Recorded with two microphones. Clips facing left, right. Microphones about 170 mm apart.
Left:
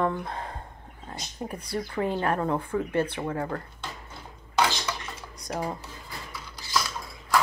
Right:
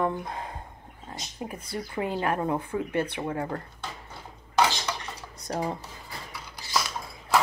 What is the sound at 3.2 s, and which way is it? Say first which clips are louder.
Speech: even; 25° right (ahead or behind).